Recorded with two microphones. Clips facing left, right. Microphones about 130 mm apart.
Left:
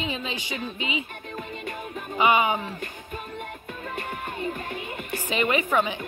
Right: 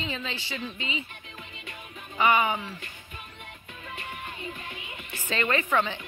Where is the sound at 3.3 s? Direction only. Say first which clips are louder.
Left 10 dB; 50° left (ahead or behind).